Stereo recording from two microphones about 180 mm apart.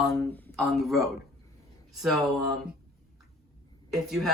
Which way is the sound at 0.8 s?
Centre (ahead or behind).